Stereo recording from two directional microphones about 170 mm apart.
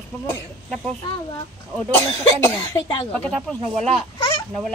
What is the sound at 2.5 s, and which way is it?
Speech, 20° left (ahead or behind).